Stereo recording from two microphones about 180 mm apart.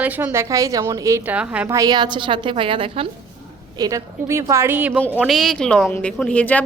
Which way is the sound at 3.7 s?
20° right (ahead or behind).